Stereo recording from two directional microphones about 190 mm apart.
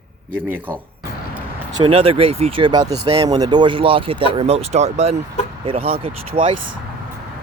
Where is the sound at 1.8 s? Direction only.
30° right (ahead or behind).